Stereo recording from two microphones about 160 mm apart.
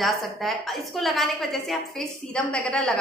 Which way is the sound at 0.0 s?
Centre (ahead or behind).